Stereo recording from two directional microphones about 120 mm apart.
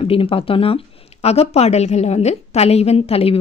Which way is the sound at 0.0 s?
50° left (ahead or behind).